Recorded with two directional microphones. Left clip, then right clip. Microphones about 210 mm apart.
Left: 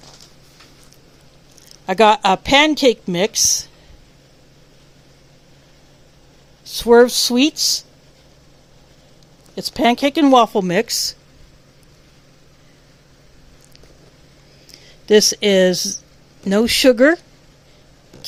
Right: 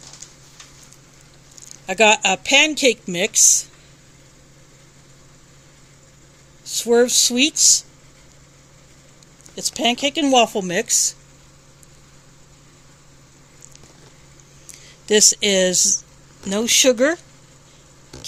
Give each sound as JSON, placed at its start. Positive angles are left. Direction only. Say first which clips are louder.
{"t": 1.9, "sound": "speech", "louder": "left 3 dB", "side_deg": 20}
{"t": 6.7, "sound": "speech", "louder": "left 5 dB", "side_deg": 20}
{"t": 9.6, "sound": "speech", "louder": "left 4 dB", "side_deg": 20}
{"t": 14.7, "sound": "speech", "louder": "left 5 dB", "side_deg": 15}
{"t": 16.8, "sound": "speech", "louder": "left 5 dB", "side_deg": 65}